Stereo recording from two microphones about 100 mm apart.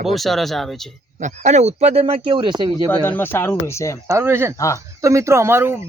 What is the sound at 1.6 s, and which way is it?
Speech, 90° right.